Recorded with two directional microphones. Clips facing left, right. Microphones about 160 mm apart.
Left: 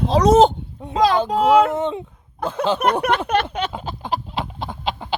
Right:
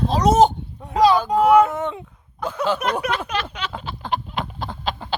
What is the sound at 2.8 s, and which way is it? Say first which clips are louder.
Speech: left 4 dB; 60° left (ahead or behind).